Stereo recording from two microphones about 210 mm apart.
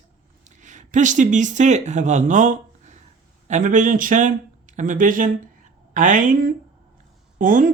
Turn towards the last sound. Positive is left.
turn(degrees=-40)  # may be behind; listen again after turning